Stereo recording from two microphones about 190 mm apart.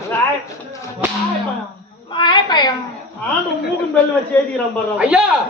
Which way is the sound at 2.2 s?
25° left (ahead or behind).